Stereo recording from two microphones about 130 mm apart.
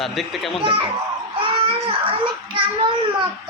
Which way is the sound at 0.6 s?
40° right (ahead or behind).